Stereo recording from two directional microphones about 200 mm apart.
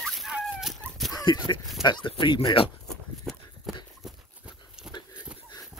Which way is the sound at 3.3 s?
5° left (ahead or behind).